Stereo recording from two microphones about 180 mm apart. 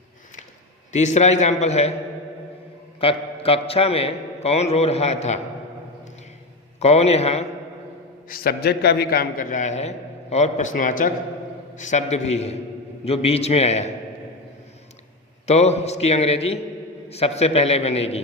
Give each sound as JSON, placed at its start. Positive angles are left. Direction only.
{"t": 0.9, "sound": "a man's voice", "side_deg": 40}
{"t": 3.0, "sound": "a man's voice", "side_deg": 30}
{"t": 6.7, "sound": "a man's voice", "side_deg": 35}
{"t": 8.3, "sound": "a man's voice", "side_deg": 55}
{"t": 15.4, "sound": "a man's voice", "side_deg": 35}